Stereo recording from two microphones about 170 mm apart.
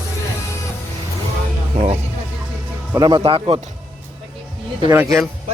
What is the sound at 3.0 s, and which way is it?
Speech, 25° right (ahead or behind).